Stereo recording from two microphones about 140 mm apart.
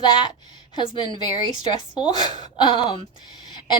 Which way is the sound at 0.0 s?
35° left (ahead or behind).